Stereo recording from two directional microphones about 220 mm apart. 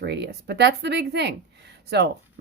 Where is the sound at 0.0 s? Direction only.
50° right (ahead or behind).